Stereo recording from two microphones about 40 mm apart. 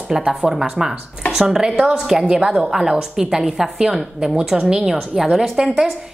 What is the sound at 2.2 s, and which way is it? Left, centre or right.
A woman's voice, right.